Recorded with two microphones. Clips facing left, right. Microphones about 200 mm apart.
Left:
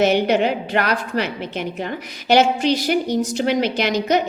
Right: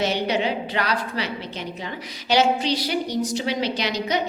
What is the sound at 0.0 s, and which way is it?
A woman's voice, 55° left (ahead or behind).